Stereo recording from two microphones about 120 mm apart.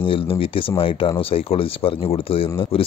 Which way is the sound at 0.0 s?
45° left (ahead or behind).